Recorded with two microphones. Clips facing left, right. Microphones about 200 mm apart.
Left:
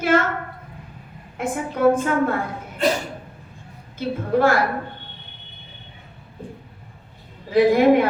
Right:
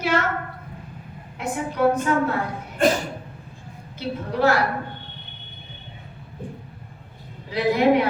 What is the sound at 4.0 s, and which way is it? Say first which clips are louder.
Female singing: left 3 dB; 50° left (ahead or behind).